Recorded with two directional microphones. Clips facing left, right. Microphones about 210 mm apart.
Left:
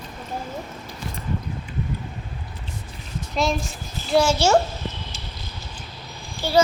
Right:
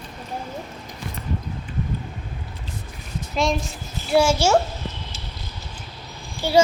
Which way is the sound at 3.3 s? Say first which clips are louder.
Right 1 dB; centre (ahead or behind).